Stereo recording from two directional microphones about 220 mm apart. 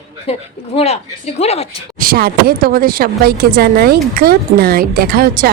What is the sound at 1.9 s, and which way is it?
Speech, 40° right (ahead or behind).